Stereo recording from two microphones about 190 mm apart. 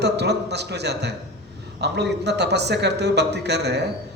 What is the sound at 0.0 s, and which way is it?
Speech, 60° right (ahead or behind).